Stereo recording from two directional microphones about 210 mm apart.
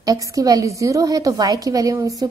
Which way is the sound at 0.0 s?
15° right (ahead or behind).